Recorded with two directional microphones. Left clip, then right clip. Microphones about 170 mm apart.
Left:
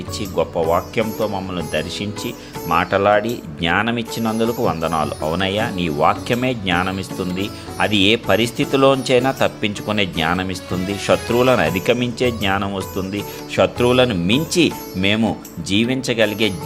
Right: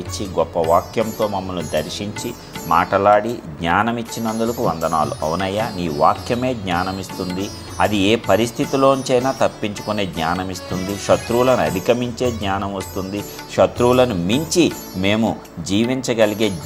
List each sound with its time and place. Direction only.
0.2 s speech: 20° left (ahead or behind)
5.0 s speech: 20° left (ahead or behind)